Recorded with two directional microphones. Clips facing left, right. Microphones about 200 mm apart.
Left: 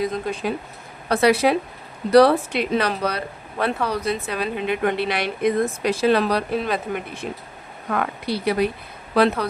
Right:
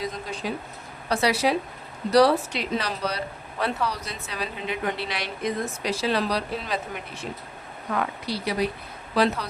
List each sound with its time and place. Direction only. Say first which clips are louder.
0.0 s speech: left 7 dB; 55° left (ahead or behind)
7.9 s speech: left 4 dB; 60° left (ahead or behind)